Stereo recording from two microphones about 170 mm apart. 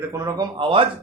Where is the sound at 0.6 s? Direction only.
30° right (ahead or behind).